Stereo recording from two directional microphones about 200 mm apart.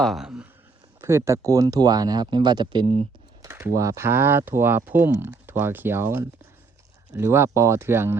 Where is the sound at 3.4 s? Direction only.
15° right (ahead or behind).